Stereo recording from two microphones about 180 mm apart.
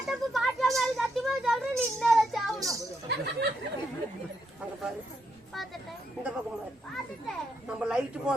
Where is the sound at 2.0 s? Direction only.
Centre (ahead or behind).